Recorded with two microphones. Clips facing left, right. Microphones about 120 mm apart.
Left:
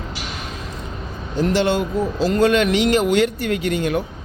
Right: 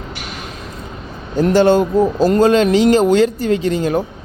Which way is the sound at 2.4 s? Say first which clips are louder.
Right 4 dB; 35° right (ahead or behind).